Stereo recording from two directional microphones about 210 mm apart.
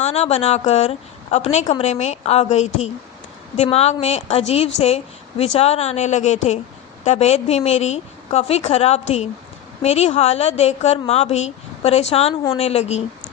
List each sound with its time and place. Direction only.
0.0 s a woman's voice: 30° left (ahead or behind)